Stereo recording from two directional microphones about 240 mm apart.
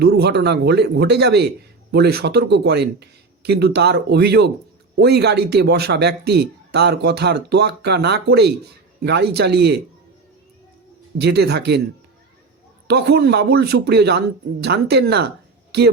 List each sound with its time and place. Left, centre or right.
0.0 s speech: right
11.2 s speech: right
12.9 s speech: right